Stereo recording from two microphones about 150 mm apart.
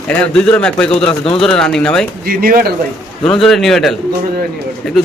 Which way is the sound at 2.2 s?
80° right.